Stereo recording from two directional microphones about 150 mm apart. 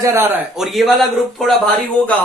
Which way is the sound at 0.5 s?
Centre (ahead or behind).